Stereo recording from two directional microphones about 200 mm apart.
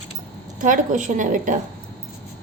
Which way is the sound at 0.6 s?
40° right (ahead or behind).